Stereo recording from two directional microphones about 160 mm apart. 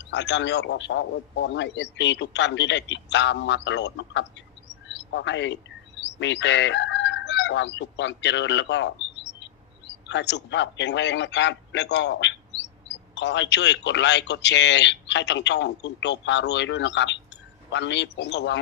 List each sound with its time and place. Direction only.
0.0 s a man's voice: 90° left
4.9 s a sound: 90° left
6.1 s a man's voice: 90° left
13.1 s a man's voice: 90° left